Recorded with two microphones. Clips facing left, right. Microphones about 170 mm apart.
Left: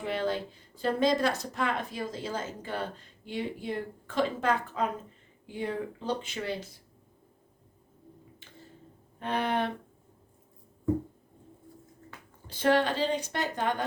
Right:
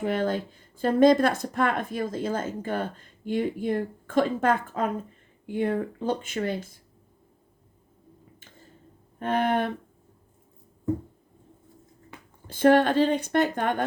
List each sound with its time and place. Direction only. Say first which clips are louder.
0.0 s speech: right 4 dB; 50° right (ahead or behind)
9.1 s speech: right 5 dB; 50° right (ahead or behind)
12.5 s speech: right 6 dB; 50° right (ahead or behind)